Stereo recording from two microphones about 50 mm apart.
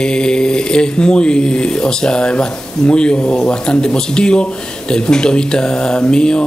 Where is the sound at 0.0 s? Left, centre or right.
Centre.